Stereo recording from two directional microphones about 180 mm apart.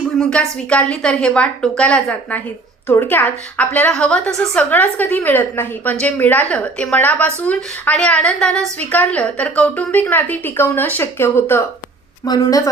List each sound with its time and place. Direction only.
0.2 s a woman's voice: 5° left (ahead or behind)